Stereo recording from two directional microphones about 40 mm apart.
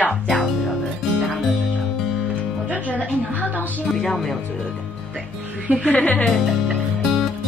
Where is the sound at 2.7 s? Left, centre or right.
Left.